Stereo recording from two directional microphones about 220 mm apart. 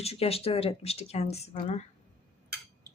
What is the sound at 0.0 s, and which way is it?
Speech, 25° left (ahead or behind).